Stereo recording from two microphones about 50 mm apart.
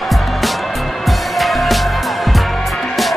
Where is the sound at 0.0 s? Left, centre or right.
Centre.